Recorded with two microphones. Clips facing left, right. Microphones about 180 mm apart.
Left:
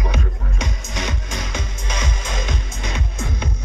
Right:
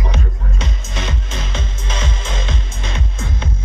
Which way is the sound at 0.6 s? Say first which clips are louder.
Even; 15° left (ahead or behind).